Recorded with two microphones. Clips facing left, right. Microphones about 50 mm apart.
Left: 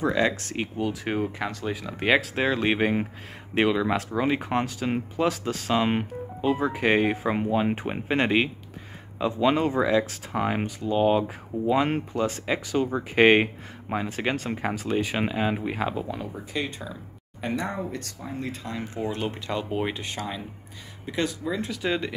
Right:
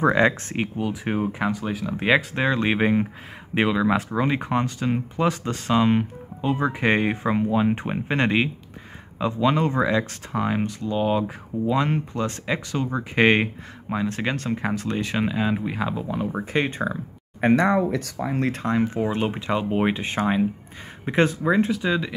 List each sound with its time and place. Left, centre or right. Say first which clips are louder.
0.0 s speech: right 5 dB; right
0.3 s speech: right 3 dB; centre
0.7 s speech: even; centre
2.0 s speech: right 2 dB; centre
16.3 s speech: right 7 dB; right
17.6 s speech: right 10 dB; right
18.5 s speech: right 11 dB; right
19.0 s speech: right 5 dB; right